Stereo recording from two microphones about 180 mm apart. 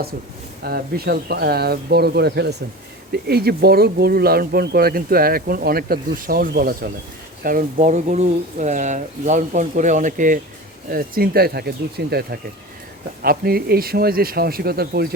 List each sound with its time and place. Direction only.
0.6 s speech: 60° right (ahead or behind)